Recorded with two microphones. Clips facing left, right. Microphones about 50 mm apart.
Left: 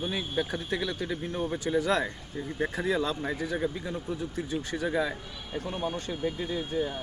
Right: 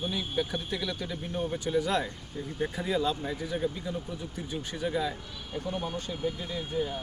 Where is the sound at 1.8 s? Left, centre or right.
Left.